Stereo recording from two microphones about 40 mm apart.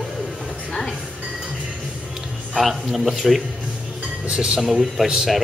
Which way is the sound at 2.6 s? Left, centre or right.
Centre.